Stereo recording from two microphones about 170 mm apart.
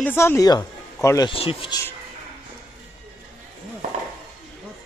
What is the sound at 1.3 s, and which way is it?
Speech, 35° left (ahead or behind).